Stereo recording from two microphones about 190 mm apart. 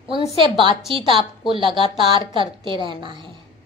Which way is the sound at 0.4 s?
25° right (ahead or behind).